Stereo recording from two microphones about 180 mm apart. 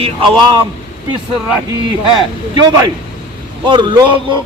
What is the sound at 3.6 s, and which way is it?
Speech, 25° right (ahead or behind).